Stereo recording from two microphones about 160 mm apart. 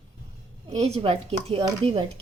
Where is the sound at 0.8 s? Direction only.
35° right (ahead or behind).